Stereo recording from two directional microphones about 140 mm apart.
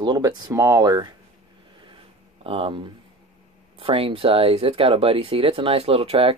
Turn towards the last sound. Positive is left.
turn(degrees=-40)  # may be behind; listen again after turning